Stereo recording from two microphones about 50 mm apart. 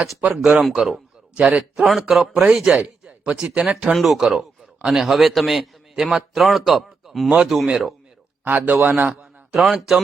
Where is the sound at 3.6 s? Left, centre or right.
Centre.